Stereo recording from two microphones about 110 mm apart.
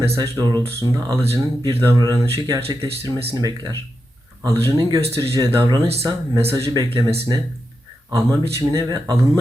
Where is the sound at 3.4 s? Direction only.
40° right (ahead or behind).